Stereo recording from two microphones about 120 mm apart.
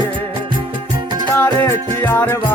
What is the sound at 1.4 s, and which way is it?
Music, 20° left (ahead or behind).